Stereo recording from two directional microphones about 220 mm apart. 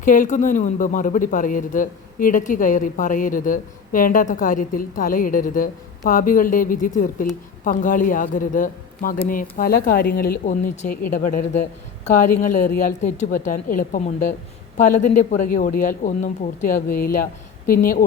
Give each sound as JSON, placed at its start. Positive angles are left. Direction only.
{"t": 0.0, "sound": "speech", "side_deg": 35}